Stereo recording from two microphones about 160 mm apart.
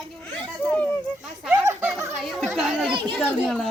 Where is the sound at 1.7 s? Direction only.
15° right (ahead or behind).